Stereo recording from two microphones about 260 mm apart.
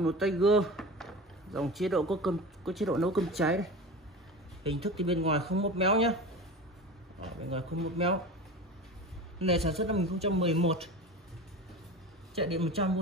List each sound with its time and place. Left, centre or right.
0.0 s speech: centre
4.6 s speech: right
7.4 s speech: right
9.4 s speech: right
12.4 s speech: right